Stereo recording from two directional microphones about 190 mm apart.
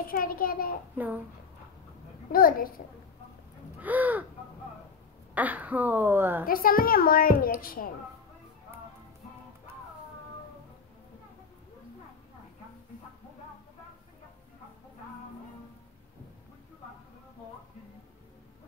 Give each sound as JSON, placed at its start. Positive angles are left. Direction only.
{"t": 0.0, "sound": "a woman's voice", "side_deg": 50}
{"t": 0.9, "sound": "speech", "side_deg": -10}
{"t": 2.3, "sound": "a woman's voice", "side_deg": 50}
{"t": 3.8, "sound": "speech", "side_deg": -10}
{"t": 5.3, "sound": "speech", "side_deg": -10}
{"t": 6.4, "sound": "a woman's voice", "side_deg": 50}